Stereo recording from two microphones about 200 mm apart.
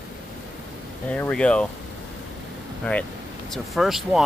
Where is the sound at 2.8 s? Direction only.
5° left (ahead or behind).